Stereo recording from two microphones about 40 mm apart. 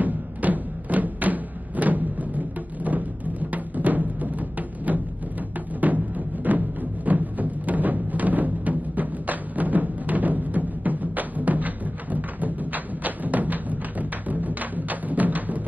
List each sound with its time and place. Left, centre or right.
0.0 s music: right